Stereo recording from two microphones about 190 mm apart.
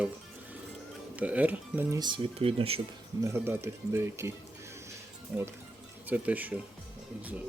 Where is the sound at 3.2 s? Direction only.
15° right (ahead or behind).